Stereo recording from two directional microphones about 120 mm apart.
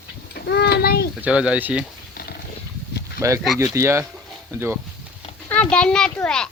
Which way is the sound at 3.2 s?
25° right (ahead or behind).